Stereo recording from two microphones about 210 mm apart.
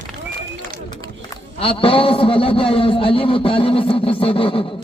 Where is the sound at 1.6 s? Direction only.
25° left (ahead or behind).